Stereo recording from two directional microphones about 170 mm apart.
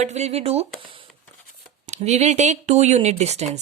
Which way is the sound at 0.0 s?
40° right (ahead or behind).